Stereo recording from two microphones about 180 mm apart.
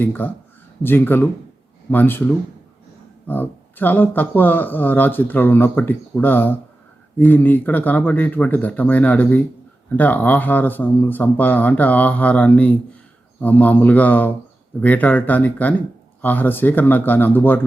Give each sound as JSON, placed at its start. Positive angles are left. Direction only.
{"t": 0.0, "sound": "speech", "side_deg": 10}